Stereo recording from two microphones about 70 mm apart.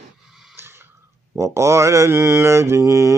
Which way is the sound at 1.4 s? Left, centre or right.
Right.